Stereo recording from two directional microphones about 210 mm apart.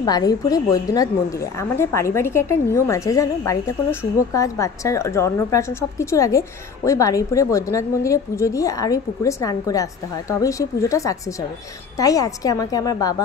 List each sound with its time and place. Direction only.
0.0 s a woman's voice: 20° left (ahead or behind)